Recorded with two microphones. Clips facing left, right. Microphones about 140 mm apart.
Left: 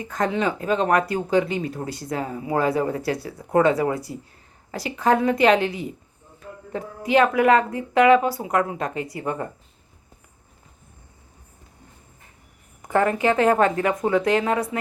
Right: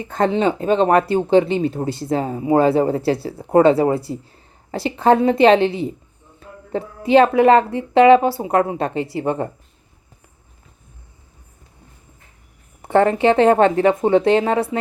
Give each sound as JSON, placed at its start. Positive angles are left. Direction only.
{"t": 0.0, "sound": "speech", "side_deg": -30}
{"t": 6.4, "sound": "a sound", "side_deg": -30}
{"t": 6.7, "sound": "speech", "side_deg": -30}
{"t": 12.8, "sound": "speech", "side_deg": -30}